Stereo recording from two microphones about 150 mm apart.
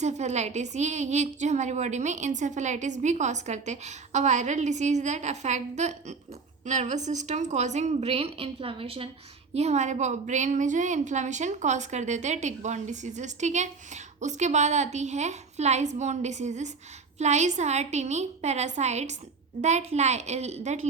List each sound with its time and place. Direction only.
0.0 s a woman's voice: 50° right (ahead or behind)